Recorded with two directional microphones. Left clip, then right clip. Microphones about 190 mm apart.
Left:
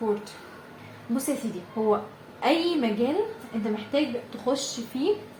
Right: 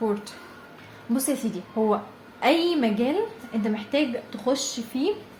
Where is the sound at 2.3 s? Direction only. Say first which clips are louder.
Right 2 dB; 25° right (ahead or behind).